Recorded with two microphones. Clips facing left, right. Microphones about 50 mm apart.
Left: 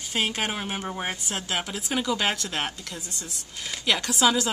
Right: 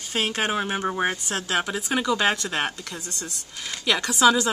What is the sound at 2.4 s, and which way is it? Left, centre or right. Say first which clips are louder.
Speech: right 3 dB; centre.